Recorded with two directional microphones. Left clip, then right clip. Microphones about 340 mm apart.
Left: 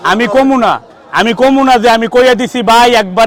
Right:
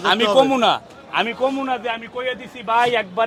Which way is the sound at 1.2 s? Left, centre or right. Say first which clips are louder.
Left 13 dB; left.